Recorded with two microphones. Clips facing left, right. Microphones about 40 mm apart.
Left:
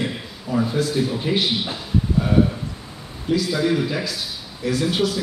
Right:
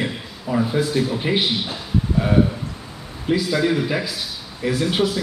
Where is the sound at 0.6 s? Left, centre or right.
Centre.